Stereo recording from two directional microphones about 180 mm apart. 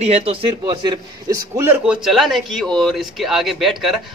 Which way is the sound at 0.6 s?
25° right (ahead or behind).